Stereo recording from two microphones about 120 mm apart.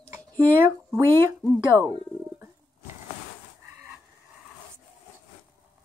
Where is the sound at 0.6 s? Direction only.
20° right (ahead or behind).